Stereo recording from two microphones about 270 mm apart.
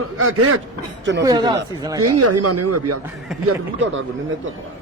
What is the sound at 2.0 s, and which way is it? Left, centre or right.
Speech, right.